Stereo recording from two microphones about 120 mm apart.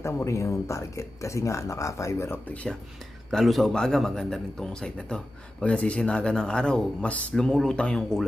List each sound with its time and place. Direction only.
0.0 s a man's voice: 25° left (ahead or behind); by 8.2 s 10° left (ahead or behind)